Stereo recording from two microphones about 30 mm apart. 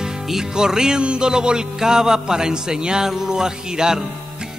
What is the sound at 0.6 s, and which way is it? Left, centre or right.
Speech, right.